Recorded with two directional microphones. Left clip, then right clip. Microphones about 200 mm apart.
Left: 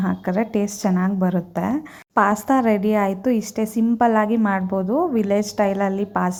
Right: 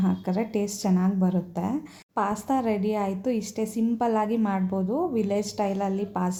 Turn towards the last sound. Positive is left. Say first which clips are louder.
# left 7 dB
turn(degrees=20)  # may be behind; listen again after turning